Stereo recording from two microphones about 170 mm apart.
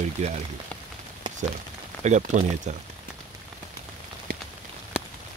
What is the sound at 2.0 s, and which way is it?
Speech, 45° right (ahead or behind).